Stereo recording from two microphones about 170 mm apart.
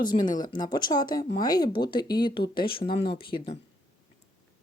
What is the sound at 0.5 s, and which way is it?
Speech, 25° left (ahead or behind).